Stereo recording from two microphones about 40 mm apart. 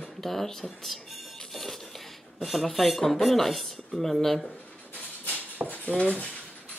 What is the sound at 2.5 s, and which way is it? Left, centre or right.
Speech, centre.